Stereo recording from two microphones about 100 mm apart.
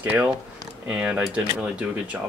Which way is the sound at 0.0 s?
15° right (ahead or behind).